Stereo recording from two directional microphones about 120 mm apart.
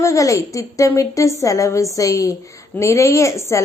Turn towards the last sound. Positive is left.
turn(degrees=25)  # may be behind; listen again after turning